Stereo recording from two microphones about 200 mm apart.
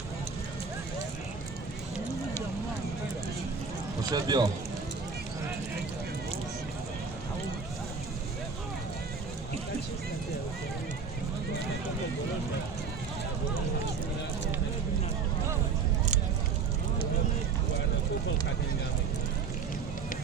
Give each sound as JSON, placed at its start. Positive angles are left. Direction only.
{"t": 4.1, "sound": "speech", "side_deg": -20}